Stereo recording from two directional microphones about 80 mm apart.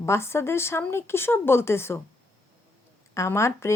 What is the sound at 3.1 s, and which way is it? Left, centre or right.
Speech, left.